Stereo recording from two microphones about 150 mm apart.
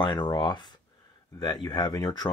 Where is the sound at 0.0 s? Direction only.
30° left (ahead or behind).